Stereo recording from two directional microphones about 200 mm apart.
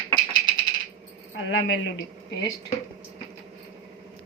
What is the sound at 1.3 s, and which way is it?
Speech, 70° left (ahead or behind).